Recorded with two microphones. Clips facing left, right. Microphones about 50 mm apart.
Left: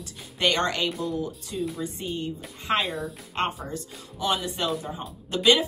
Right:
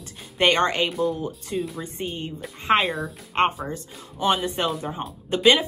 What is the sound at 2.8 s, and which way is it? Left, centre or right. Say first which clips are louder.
Speech: right 4 dB; centre.